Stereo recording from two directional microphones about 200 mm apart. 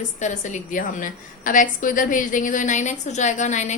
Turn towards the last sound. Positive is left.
turn(degrees=35)  # may be behind; listen again after turning